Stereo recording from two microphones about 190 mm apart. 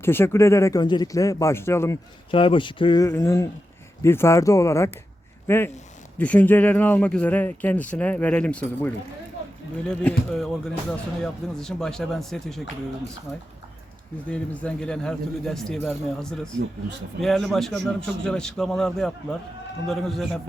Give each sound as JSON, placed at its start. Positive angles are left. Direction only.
{"t": 0.0, "sound": "speech", "side_deg": 10}
{"t": 2.3, "sound": "speech", "side_deg": 25}
{"t": 3.1, "sound": "speech", "side_deg": 15}
{"t": 10.0, "sound": "speech", "side_deg": 5}
{"t": 14.3, "sound": "speech", "side_deg": 5}
{"t": 17.2, "sound": "speech", "side_deg": 0}